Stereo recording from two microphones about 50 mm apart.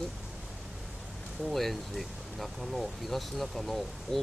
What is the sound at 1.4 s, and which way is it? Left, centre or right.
Speech, centre.